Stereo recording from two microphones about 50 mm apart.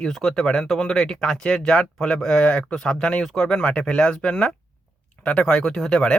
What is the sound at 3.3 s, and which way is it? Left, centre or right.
Speech, centre.